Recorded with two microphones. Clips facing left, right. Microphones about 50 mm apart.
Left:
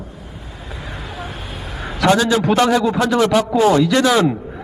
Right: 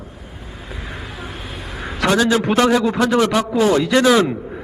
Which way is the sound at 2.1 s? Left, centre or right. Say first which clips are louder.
Left 1 dB; centre.